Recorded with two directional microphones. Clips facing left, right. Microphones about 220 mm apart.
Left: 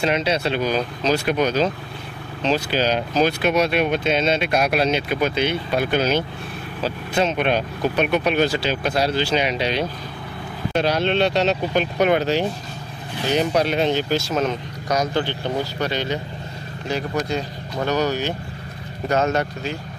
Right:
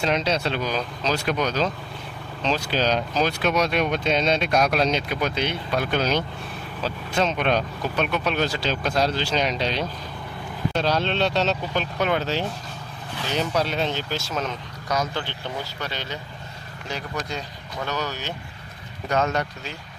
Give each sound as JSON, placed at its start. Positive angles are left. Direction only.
{"t": 0.0, "sound": "speech", "side_deg": 10}
{"t": 15.0, "sound": "speech", "side_deg": 40}
{"t": 17.8, "sound": "speech", "side_deg": 35}